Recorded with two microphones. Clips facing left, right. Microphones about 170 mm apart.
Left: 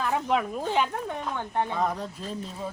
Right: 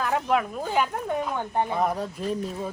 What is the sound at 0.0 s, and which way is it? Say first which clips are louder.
Speech: right 2 dB; centre (ahead or behind).